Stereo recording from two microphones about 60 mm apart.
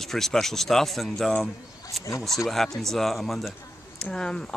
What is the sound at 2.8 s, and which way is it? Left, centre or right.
Speech, centre.